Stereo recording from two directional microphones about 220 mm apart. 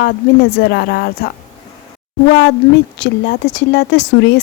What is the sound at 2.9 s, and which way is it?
Speech, 50° left (ahead or behind).